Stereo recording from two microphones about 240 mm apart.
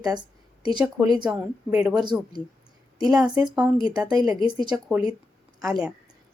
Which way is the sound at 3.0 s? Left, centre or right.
Centre.